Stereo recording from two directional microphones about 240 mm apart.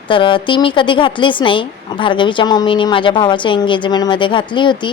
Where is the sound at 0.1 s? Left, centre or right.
Left.